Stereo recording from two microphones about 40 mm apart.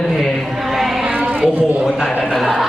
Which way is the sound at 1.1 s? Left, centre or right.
Right.